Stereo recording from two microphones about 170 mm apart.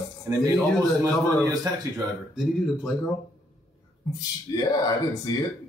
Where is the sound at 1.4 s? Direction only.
20° right (ahead or behind).